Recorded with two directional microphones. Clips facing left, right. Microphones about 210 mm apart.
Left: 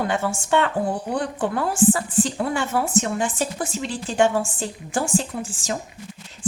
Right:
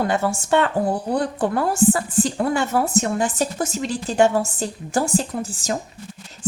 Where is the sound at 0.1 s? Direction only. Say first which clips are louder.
Right 2 dB; 40° right (ahead or behind).